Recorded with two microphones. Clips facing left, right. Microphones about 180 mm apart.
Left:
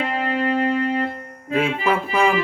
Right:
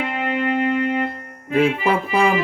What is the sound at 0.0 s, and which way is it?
Music, 35° left (ahead or behind).